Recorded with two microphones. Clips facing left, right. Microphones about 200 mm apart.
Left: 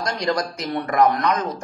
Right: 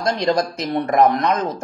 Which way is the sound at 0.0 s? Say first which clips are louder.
Right 4 dB; 25° right (ahead or behind).